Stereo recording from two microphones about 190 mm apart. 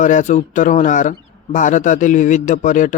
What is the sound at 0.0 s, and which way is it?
Speech, 40° left (ahead or behind).